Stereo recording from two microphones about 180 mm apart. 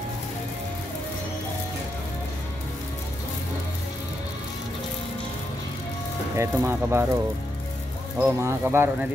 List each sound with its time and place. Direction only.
6.3 s speech: 15° right (ahead or behind)
8.2 s speech: 15° right (ahead or behind)